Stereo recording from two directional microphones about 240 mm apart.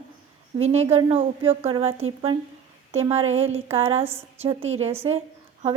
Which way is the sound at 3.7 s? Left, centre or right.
Right.